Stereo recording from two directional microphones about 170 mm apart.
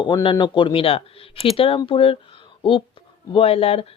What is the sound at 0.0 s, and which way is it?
Speech, 30° left (ahead or behind).